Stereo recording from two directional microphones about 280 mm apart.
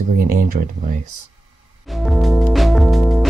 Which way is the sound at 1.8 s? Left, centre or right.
Centre.